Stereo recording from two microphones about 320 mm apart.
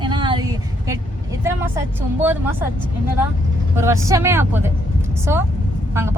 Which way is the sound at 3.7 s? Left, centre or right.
Centre.